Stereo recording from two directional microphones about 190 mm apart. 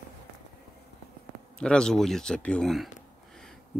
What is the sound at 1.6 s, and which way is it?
Speech, 5° left (ahead or behind).